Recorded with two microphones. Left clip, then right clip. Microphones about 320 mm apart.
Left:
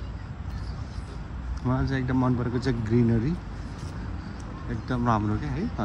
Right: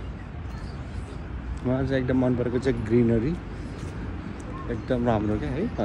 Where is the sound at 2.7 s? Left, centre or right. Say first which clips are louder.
Right 3 dB; left.